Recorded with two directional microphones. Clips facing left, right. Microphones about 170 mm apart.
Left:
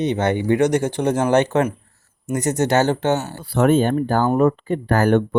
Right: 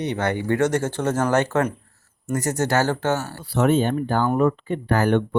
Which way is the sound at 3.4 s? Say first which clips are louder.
Left 3 dB; 55° left (ahead or behind).